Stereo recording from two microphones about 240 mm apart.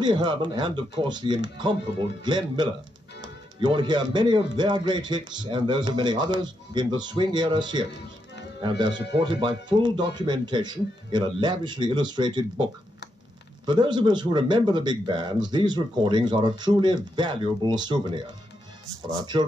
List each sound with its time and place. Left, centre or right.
0.0 s speech: centre
13.7 s speech: centre